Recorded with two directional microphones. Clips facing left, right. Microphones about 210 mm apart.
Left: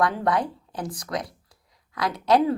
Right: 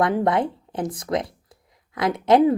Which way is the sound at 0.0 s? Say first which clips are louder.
Right 3 dB; 25° right (ahead or behind).